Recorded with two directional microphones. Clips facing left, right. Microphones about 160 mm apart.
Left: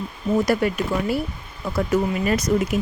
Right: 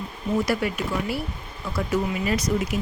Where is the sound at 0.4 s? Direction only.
45° left (ahead or behind).